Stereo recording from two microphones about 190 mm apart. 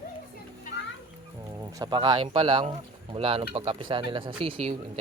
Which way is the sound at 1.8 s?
25° right (ahead or behind).